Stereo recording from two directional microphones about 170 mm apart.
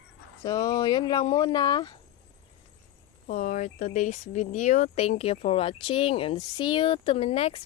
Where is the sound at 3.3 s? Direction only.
50° left (ahead or behind).